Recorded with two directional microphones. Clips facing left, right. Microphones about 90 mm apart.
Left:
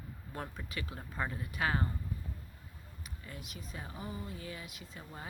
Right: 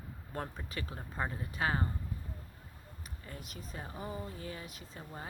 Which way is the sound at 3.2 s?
40° right (ahead or behind).